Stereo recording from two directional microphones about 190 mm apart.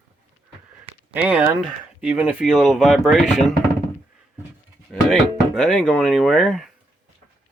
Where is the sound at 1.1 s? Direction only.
5° right (ahead or behind).